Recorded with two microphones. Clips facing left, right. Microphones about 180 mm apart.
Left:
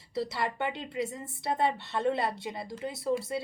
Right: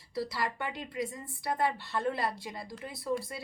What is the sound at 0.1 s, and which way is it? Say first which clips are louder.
A woman's voice: left 2 dB; 25° left (ahead or behind).